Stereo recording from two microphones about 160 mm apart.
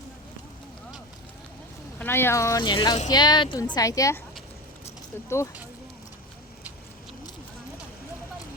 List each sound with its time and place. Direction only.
2.0 s speech: 15° left (ahead or behind)